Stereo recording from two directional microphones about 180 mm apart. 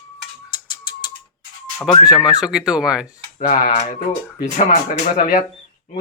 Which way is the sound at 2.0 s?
5° right (ahead or behind).